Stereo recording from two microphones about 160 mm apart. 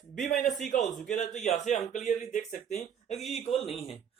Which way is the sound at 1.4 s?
45° left (ahead or behind).